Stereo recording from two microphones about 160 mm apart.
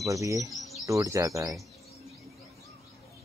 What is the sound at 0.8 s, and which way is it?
Speech, 20° right (ahead or behind).